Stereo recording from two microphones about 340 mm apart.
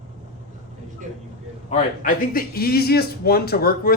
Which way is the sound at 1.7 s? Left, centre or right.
Left.